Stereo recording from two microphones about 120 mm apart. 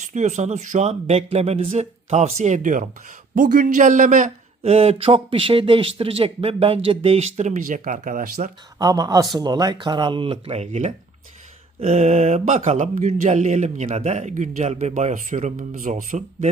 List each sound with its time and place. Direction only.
0.0 s speech: 85° right
8.8 s speech: 30° right (ahead or behind); by 16.5 s 90° right